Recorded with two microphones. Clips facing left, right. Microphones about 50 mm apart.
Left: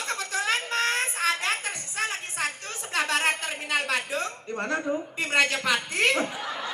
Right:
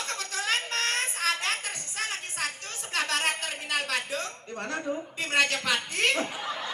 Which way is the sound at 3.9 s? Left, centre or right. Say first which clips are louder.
Left 3 dB; left.